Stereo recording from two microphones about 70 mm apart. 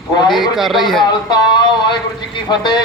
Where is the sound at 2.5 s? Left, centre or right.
Left.